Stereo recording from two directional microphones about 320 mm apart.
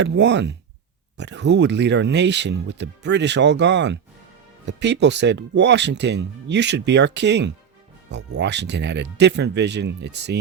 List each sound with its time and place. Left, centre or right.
0.0 s speech: right